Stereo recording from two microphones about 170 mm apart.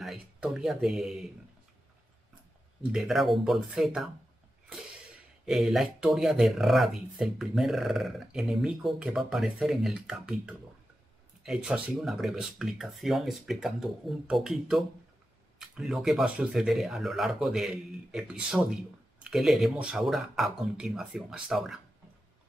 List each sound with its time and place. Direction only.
0.0 s speech: centre (ahead or behind)
2.8 s speech: 5° right (ahead or behind)
5.4 s speech: centre (ahead or behind)